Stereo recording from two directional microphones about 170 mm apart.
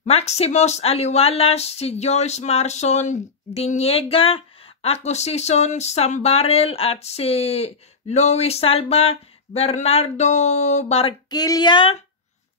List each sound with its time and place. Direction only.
0.0 s speech: 40° left (ahead or behind)